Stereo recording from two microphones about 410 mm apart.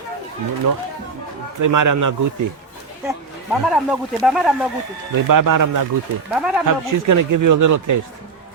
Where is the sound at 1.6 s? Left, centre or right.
Right.